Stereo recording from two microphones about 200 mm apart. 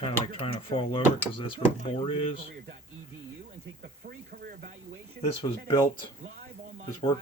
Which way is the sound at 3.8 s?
50° right (ahead or behind).